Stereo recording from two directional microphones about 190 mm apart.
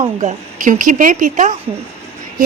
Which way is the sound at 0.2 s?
40° right (ahead or behind).